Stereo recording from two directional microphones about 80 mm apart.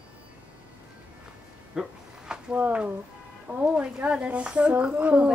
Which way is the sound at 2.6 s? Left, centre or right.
Centre.